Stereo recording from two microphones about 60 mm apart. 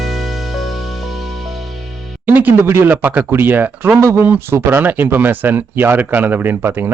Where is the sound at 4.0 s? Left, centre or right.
Right.